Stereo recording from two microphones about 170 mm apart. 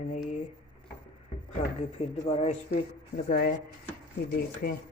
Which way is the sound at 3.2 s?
60° left (ahead or behind).